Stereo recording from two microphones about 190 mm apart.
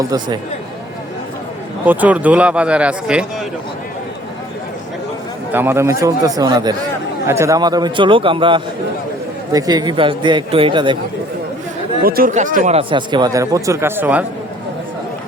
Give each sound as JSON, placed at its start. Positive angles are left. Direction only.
{"t": 0.0, "sound": "a man's voice", "side_deg": -20}
{"t": 1.9, "sound": "speech", "side_deg": -10}
{"t": 5.5, "sound": "a man's voice", "side_deg": -10}
{"t": 12.0, "sound": "speech", "side_deg": -50}
{"t": 12.9, "sound": "speech", "side_deg": -25}